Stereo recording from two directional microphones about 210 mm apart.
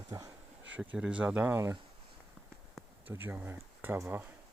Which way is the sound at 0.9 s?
5° right (ahead or behind).